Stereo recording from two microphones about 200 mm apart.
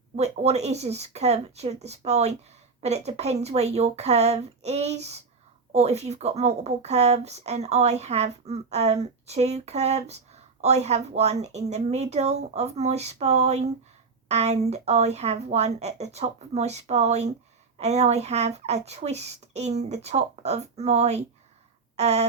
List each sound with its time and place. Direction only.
0.2 s a woman's voice: 35° right (ahead or behind)